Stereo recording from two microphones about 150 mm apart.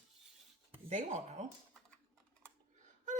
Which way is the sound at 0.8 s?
50° right (ahead or behind).